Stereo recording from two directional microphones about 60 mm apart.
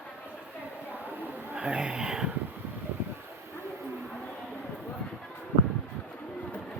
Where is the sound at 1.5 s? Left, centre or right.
Centre.